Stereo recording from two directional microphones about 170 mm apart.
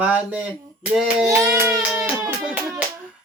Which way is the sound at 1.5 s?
5° right (ahead or behind).